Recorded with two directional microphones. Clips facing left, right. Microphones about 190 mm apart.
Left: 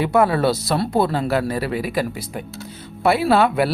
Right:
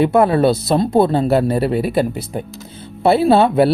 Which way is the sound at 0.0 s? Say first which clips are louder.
Right 4 dB; 25° right (ahead or behind).